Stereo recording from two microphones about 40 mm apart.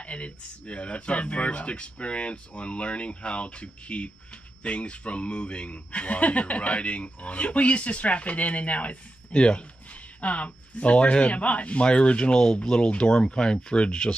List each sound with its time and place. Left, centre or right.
0.0 s speech: left